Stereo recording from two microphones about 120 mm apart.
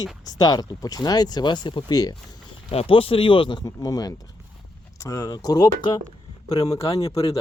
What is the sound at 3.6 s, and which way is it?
Speech, 30° left (ahead or behind).